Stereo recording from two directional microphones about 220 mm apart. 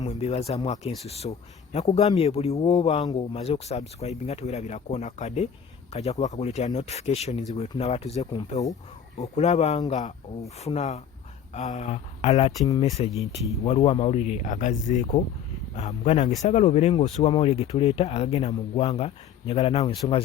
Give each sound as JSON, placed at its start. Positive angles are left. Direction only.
{"t": 0.0, "sound": "speech", "side_deg": 30}